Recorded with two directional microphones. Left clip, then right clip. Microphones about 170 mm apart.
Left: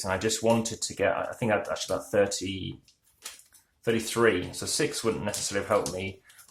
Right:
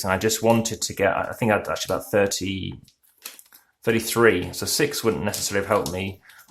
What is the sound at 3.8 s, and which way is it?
Speech, 35° right (ahead or behind).